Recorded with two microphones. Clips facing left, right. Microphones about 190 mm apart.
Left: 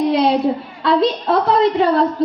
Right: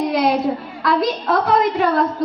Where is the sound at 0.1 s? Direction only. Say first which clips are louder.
Left 2 dB; 30° left (ahead or behind).